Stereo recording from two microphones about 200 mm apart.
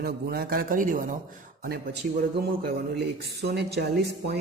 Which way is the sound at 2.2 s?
55° right (ahead or behind).